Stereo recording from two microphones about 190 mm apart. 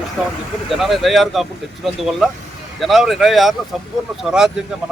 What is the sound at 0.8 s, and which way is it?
Speech, centre (ahead or behind).